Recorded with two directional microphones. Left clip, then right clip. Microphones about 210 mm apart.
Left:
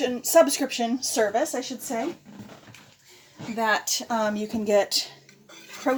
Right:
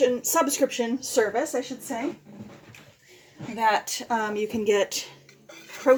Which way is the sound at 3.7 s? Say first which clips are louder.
Even; 40° left (ahead or behind).